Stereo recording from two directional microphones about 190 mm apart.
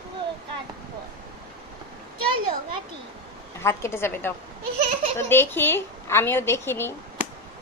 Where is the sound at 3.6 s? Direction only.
15° left (ahead or behind).